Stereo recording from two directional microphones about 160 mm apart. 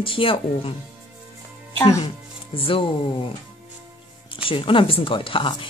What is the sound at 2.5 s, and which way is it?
Speech, 35° left (ahead or behind).